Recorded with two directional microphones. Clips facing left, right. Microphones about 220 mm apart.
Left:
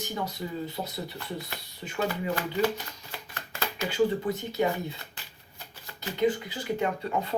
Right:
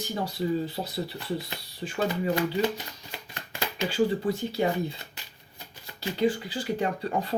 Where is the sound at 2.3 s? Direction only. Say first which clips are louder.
Right 2 dB; 20° right (ahead or behind).